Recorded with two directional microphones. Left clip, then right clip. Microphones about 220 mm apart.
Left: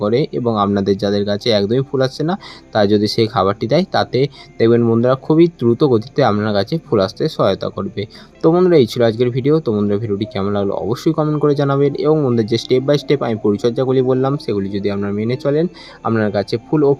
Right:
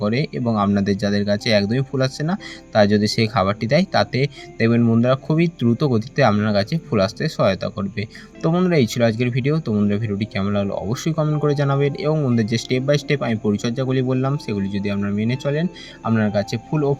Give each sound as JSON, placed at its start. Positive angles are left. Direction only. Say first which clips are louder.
{"t": 0.0, "sound": "speech", "louder": "left 6 dB", "side_deg": -30}